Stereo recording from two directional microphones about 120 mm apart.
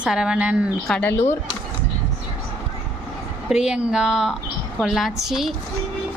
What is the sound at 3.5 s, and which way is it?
A woman's voice, 5° right (ahead or behind).